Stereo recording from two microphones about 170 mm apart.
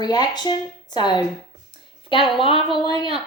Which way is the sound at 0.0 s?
25° left (ahead or behind).